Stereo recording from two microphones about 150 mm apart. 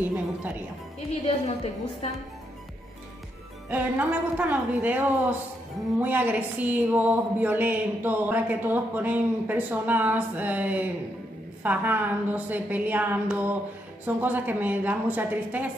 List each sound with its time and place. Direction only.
0.0 s a woman's voice: 10° right (ahead or behind)
1.2 s a woman's voice: 40° left (ahead or behind)
3.7 s a woman's voice: 10° right (ahead or behind)